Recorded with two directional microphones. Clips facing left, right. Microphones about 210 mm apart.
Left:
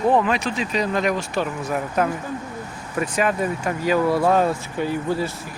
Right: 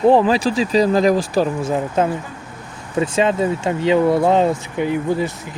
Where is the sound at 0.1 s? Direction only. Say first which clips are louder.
Right 6 dB; 30° right (ahead or behind).